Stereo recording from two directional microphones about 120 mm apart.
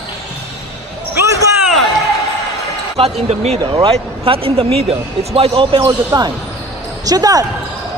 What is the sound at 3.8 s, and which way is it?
Speech, 50° right (ahead or behind).